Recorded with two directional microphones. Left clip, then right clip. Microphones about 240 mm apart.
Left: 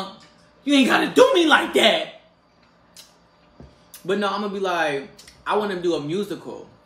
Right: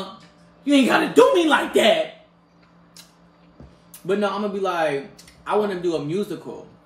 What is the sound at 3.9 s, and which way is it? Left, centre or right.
Speech, centre.